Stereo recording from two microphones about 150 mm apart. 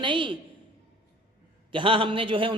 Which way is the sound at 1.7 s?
35° right (ahead or behind).